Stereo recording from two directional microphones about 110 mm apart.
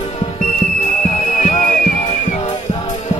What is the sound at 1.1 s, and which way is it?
Whistle, 90° left.